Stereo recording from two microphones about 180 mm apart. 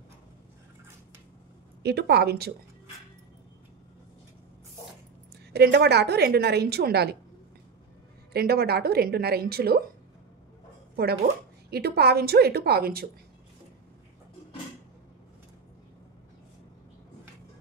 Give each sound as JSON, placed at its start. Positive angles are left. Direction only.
{"t": 1.8, "sound": "a woman's voice", "side_deg": -65}
{"t": 5.5, "sound": "a woman's voice", "side_deg": -65}
{"t": 8.3, "sound": "a woman's voice", "side_deg": -60}
{"t": 11.7, "sound": "a woman's voice", "side_deg": -60}